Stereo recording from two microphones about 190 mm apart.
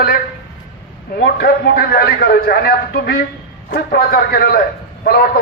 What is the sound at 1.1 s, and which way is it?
A man's voice, 60° left (ahead or behind).